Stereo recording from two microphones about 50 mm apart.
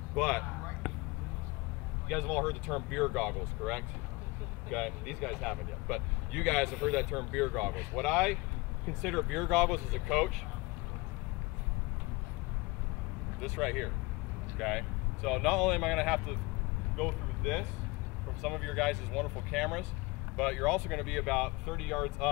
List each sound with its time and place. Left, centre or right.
0.1 s speech: centre
0.5 s a sound: left
2.4 s speech: centre
13.4 s speech: centre
16.9 s vehicle: centre
18.4 s speech: centre